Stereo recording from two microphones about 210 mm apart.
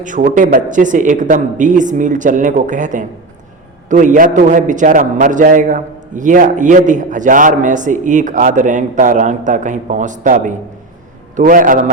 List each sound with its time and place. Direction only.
0.0 s a man's voice: 40° right (ahead or behind)